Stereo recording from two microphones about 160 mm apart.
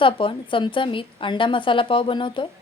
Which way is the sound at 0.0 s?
30° left (ahead or behind).